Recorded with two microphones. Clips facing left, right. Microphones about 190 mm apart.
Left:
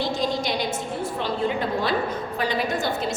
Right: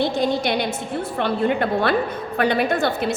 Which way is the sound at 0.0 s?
60° right (ahead or behind).